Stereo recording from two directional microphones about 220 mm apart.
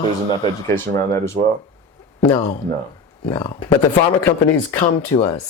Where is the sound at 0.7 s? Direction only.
10° left (ahead or behind).